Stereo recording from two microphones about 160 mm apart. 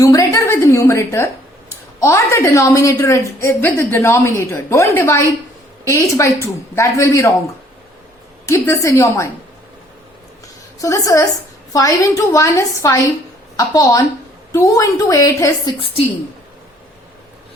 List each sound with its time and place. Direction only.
0.0 s a woman's voice: 20° left (ahead or behind)
8.4 s a man's voice: 20° left (ahead or behind)
10.8 s a man's voice: 20° left (ahead or behind)